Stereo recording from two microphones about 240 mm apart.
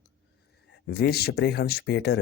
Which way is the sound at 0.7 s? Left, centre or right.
Left.